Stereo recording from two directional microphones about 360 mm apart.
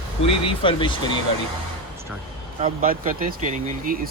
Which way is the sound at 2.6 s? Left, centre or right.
Right.